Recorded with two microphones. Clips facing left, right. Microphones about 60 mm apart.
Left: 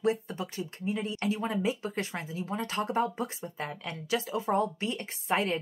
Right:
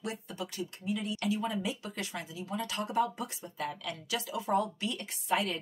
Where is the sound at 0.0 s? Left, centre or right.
Left.